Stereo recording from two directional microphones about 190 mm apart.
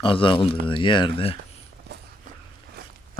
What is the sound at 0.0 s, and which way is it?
Speech, 25° left (ahead or behind).